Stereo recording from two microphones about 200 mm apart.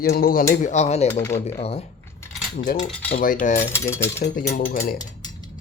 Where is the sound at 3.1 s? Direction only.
40° left (ahead or behind).